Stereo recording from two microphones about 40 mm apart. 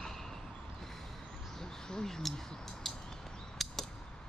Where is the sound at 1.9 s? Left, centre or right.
Centre.